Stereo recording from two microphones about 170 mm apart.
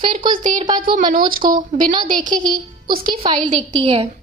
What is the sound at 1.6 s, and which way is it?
A woman's voice, 50° right (ahead or behind).